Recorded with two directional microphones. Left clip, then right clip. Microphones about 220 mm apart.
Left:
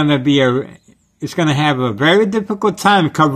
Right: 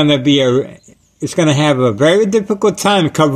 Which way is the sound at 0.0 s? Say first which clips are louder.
Right 2 dB; 15° left (ahead or behind).